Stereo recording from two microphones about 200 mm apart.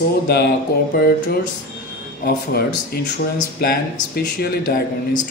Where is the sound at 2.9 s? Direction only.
50° left (ahead or behind).